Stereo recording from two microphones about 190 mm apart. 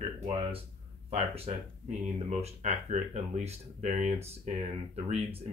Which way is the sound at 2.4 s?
40° right (ahead or behind).